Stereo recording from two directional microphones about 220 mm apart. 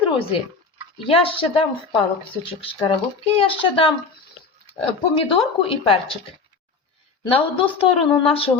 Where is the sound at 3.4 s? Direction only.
25° left (ahead or behind).